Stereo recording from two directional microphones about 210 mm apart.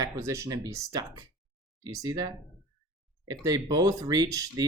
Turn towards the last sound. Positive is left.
turn(degrees=-15)  # may be behind; listen again after turning